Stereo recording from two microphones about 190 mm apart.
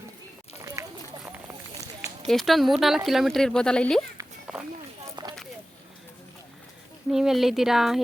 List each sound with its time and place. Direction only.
0.8 s run: 15° right (ahead or behind)
1.7 s a sound: 15° right (ahead or behind)
2.2 s speech: centre (ahead or behind)
4.5 s run: 5° right (ahead or behind)
5.2 s a sound: 20° right (ahead or behind)
7.1 s speech: centre (ahead or behind)